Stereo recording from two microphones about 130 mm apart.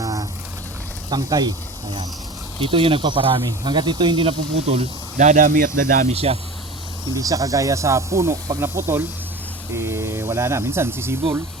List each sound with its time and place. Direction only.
0.0 s a sound: 30° right (ahead or behind)
1.1 s speech: 30° right (ahead or behind); by 4.9 s 55° right (ahead or behind)
5.1 s speech: 80° right
6.1 s speech: 50° right (ahead or behind)
7.1 s speech: 25° right (ahead or behind)